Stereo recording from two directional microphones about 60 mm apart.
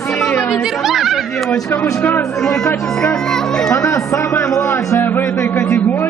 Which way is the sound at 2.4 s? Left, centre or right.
Centre.